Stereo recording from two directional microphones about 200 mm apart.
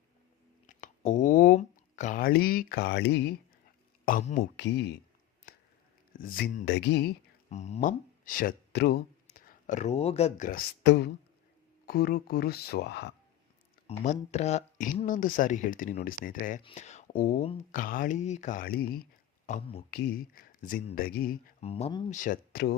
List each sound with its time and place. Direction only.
0.7 s speech: 35° left (ahead or behind); by 3.3 s 60° left (ahead or behind)
4.0 s speech: 40° left (ahead or behind)
4.4 s speech: 60° left (ahead or behind)
5.5 s a sound: 50° left (ahead or behind)
6.1 s speech: 45° left (ahead or behind)
6.7 s speech: 55° left (ahead or behind)
7.5 s speech: 35° left (ahead or behind)
10.8 s speech: 55° left (ahead or behind)
13.8 s speech: 35° left (ahead or behind)
19.5 s speech: 35° left (ahead or behind)
19.9 s speech: 50° left (ahead or behind)
21.6 s speech: 30° left (ahead or behind)
22.1 s speech: 40° left (ahead or behind)